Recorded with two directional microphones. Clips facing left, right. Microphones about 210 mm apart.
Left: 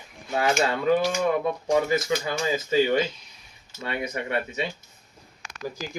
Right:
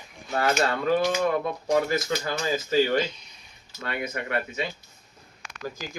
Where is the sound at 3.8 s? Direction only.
15° left (ahead or behind).